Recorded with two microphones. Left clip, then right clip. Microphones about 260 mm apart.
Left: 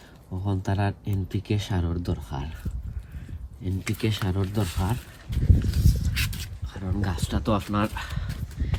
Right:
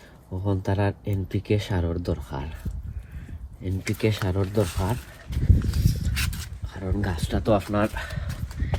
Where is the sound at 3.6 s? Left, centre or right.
Centre.